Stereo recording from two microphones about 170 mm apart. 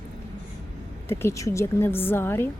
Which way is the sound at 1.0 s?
15° left (ahead or behind).